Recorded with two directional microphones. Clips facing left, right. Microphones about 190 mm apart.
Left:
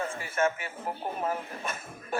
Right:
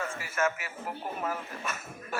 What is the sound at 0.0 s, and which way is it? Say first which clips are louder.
A man's voice: left 2 dB; 30° left (ahead or behind).